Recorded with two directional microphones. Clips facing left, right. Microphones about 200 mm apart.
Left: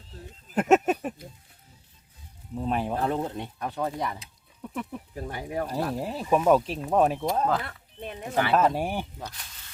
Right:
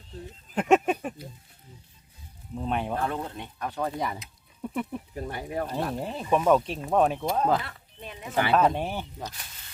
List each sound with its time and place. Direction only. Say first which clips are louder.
0.5 s a sound: left 1 dB; 5° left (ahead or behind)
2.6 s speech: left 2 dB; centre (ahead or behind)
2.9 s speech: left 3 dB; 25° left (ahead or behind)
3.3 s speech: left 2 dB; 35° left (ahead or behind)
3.7 s speech: right 1 dB; 5° left (ahead or behind)
4.6 s music: right 3 dB; 10° right (ahead or behind)
5.1 s speech: left 1 dB; 5° left (ahead or behind)
7.6 s a sound: left 3 dB; 50° left (ahead or behind)
8.5 s speech: even; 5° left (ahead or behind)